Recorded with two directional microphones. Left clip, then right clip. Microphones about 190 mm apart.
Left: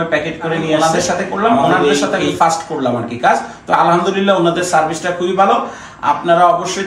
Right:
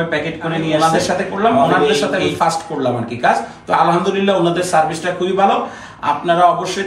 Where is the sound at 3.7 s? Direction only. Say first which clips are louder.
Left 2 dB; 15° left (ahead or behind).